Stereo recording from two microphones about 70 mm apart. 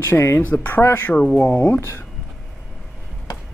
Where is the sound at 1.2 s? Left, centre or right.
Centre.